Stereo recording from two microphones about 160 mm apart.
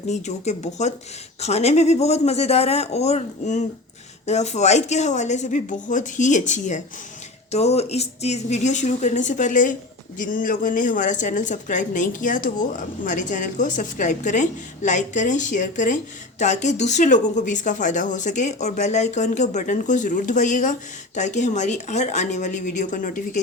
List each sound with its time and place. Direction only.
0.1 s speech: 45° left (ahead or behind)